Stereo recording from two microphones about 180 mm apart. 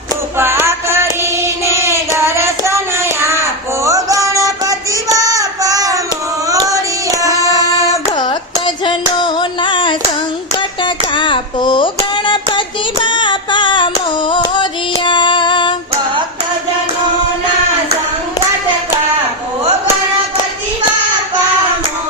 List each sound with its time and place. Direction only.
0.3 s music: 15° right (ahead or behind)
1.2 s child singing: 15° right (ahead or behind)
3.8 s a sound: 20° right (ahead or behind)
6.5 s child singing: 20° right (ahead or behind)
7.2 s music: 20° right (ahead or behind)
8.1 s music: 25° left (ahead or behind)
10.8 s a sound: 25° left (ahead or behind)